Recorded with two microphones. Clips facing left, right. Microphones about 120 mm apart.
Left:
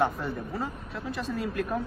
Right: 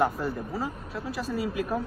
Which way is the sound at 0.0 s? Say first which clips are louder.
Right 1 dB; centre (ahead or behind).